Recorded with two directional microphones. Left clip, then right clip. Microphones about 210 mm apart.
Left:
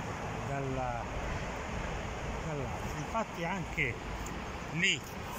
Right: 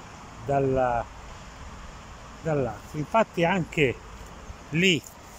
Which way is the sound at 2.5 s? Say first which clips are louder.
Right 10 dB; 55° right (ahead or behind).